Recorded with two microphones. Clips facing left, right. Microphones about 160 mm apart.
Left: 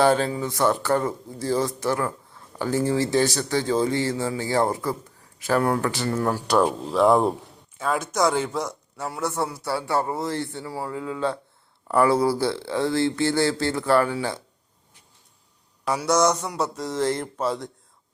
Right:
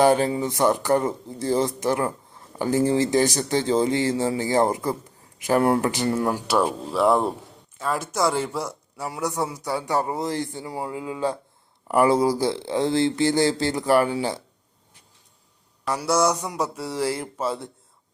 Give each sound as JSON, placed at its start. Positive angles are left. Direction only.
{"t": 0.0, "sound": "a man's voice", "side_deg": -15}
{"t": 15.8, "sound": "a man's voice", "side_deg": 0}